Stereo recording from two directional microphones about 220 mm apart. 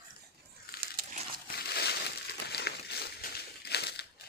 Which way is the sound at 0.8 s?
40° right (ahead or behind).